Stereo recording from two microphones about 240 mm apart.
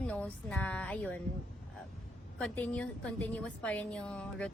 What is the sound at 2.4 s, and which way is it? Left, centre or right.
A woman's voice, centre.